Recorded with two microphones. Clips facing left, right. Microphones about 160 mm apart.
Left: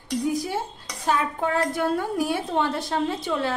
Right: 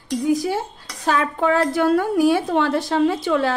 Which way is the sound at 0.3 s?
90° right.